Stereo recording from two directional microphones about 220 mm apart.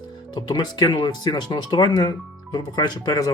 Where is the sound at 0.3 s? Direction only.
20° left (ahead or behind).